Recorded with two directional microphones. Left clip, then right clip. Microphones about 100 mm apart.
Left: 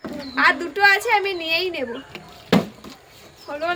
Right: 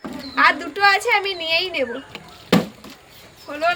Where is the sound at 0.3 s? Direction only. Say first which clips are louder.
Right 1 dB; 30° left (ahead or behind).